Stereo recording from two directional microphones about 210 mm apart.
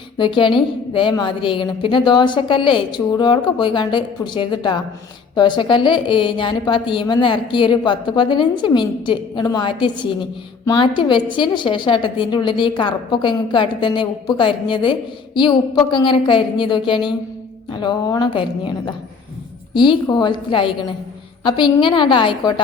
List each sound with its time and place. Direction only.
0.2 s a woman's voice: 25° left (ahead or behind)